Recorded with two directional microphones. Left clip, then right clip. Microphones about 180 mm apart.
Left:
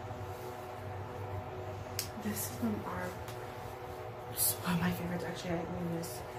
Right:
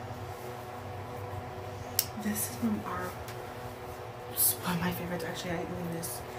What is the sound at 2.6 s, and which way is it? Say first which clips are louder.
Speech: right 3 dB; 20° right (ahead or behind).